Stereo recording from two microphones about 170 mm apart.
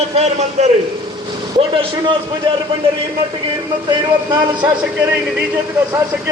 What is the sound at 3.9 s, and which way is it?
Speech, 25° right (ahead or behind).